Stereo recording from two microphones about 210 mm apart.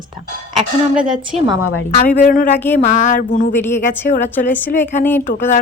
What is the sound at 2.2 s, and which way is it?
A woman's voice, 40° left (ahead or behind).